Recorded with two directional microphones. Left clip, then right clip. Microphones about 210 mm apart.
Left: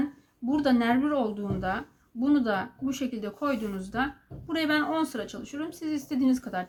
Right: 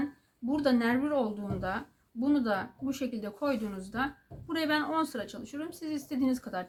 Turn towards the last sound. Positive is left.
turn(degrees=0)  # may be behind; listen again after turning